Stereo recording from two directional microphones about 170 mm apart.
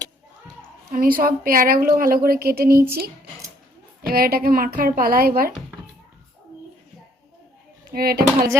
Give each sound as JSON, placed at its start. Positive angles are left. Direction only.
{"t": 0.9, "sound": "a woman's voice", "side_deg": -55}
{"t": 4.0, "sound": "a woman's voice", "side_deg": -60}
{"t": 7.9, "sound": "a woman's voice", "side_deg": -65}